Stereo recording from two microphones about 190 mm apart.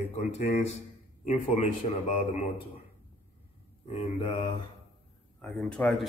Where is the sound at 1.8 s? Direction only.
35° left (ahead or behind).